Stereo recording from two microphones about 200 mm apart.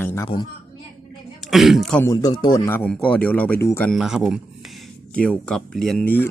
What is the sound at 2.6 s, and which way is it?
Speech, 10° left (ahead or behind).